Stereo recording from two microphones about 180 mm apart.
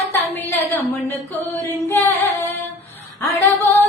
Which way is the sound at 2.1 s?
10° left (ahead or behind).